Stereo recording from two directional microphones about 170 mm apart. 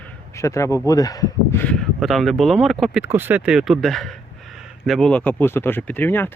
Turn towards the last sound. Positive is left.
turn(degrees=10)  # may be behind; listen again after turning